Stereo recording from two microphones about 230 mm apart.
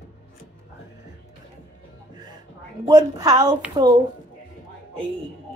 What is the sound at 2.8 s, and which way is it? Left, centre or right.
A woman's voice, centre.